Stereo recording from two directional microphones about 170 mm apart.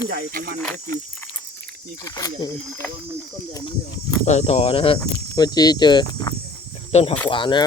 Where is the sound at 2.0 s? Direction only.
20° left (ahead or behind).